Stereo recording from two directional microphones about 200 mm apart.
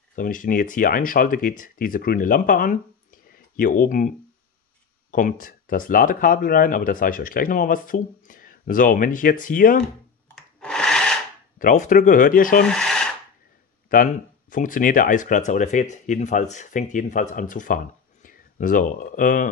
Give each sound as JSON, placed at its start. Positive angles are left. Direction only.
{"t": 0.1, "sound": "speech", "side_deg": 45}
{"t": 5.1, "sound": "speech", "side_deg": 45}
{"t": 10.6, "sound": "rub", "side_deg": 5}
{"t": 11.5, "sound": "speech", "side_deg": 40}
{"t": 12.6, "sound": "rub", "side_deg": 5}
{"t": 13.8, "sound": "speech", "side_deg": 45}